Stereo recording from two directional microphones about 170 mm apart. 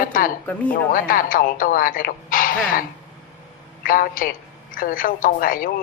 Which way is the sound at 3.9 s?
55° left (ahead or behind).